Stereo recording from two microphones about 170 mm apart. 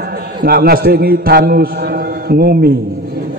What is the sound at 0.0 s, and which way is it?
A man's voice, 65° right (ahead or behind).